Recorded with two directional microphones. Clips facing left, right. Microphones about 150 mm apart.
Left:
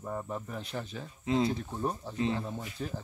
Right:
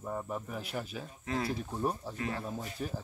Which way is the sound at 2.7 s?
5° right (ahead or behind).